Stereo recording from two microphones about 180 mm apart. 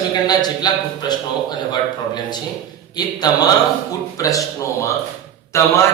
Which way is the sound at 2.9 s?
20° left (ahead or behind).